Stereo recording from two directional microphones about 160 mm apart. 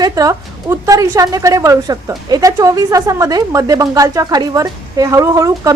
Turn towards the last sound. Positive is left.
turn(degrees=-20)  # may be behind; listen again after turning